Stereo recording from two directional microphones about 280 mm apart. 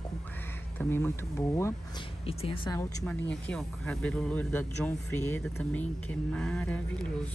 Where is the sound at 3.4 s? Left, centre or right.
Centre.